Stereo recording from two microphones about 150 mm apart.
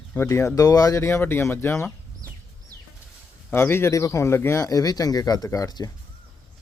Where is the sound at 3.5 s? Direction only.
15° left (ahead or behind).